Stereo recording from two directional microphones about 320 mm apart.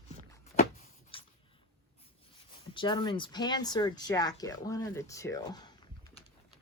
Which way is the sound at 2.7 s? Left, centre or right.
Centre.